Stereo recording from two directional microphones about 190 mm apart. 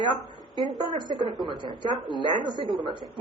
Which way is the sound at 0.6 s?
Centre (ahead or behind).